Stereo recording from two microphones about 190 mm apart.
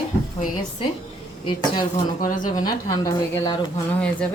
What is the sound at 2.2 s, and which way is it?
Speech, 45° left (ahead or behind).